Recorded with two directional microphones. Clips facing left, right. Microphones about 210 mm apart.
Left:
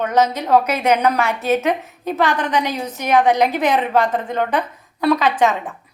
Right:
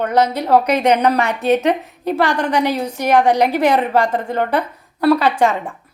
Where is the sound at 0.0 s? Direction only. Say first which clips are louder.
Right 1 dB; 10° right (ahead or behind).